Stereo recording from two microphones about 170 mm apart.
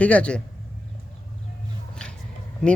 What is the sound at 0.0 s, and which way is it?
Speech, 5° left (ahead or behind).